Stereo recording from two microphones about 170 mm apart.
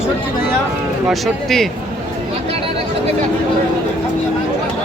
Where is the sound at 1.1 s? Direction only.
Centre (ahead or behind).